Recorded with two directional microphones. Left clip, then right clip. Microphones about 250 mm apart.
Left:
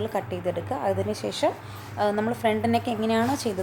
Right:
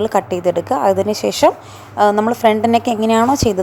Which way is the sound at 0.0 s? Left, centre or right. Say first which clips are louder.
Right 12 dB; right.